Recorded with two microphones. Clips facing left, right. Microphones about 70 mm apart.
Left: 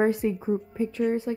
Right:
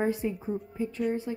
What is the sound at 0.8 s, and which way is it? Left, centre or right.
Speech, left.